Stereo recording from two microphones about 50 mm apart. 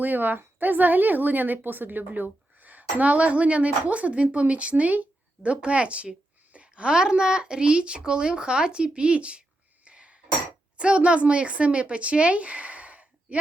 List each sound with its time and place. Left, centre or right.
0.0 s speech: right
9.8 s cutlery: right
10.8 s speech: right